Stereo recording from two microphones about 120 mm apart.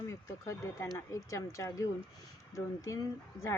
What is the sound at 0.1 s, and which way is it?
Speech, 25° left (ahead or behind).